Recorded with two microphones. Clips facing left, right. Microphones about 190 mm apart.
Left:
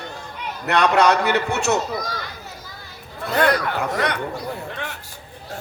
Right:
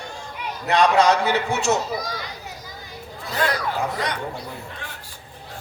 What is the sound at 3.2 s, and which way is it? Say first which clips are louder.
Speech: left 5 dB; 60° left (ahead or behind).